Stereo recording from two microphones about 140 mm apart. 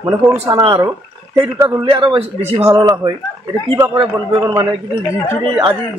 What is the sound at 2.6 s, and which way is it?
Speech, 25° right (ahead or behind).